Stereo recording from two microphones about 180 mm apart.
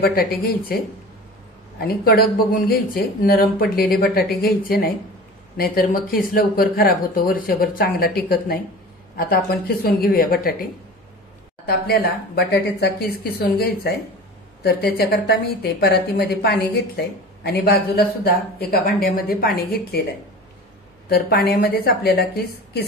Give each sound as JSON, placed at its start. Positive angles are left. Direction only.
{"t": 0.0, "sound": "a woman's voice", "side_deg": 60}
{"t": 1.8, "sound": "a woman's voice", "side_deg": 55}
{"t": 11.6, "sound": "a woman's voice", "side_deg": 60}
{"t": 21.1, "sound": "a woman's voice", "side_deg": 60}